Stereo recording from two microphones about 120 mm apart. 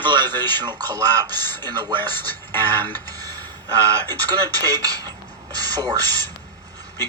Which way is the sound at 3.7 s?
30° right (ahead or behind).